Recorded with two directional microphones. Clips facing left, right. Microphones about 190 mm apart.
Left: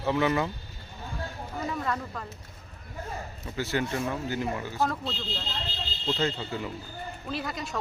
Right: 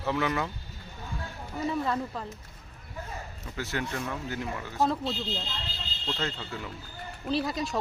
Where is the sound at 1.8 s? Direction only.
15° right (ahead or behind).